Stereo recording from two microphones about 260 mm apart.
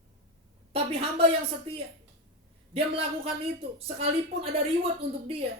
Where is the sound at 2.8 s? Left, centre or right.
Right.